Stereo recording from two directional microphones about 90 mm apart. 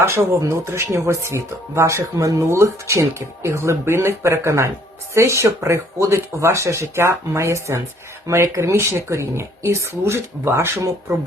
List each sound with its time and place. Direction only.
0.0 s speech: 30° right (ahead or behind)